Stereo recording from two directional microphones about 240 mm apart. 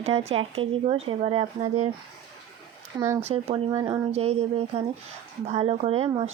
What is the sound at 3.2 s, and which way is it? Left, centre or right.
Speech, right.